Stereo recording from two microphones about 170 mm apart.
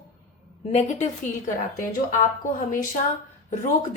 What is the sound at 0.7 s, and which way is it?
Speech, 40° left (ahead or behind).